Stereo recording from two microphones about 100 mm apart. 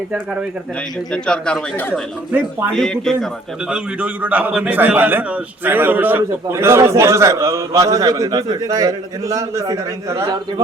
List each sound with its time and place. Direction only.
1.1 s speech: 10° left (ahead or behind)
2.7 s a man's voice: 5° left (ahead or behind)
3.7 s a man's voice: 10° right (ahead or behind); by 10.3 s 30° right (ahead or behind)